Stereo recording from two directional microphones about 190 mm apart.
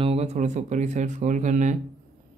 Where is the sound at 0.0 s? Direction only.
35° right (ahead or behind).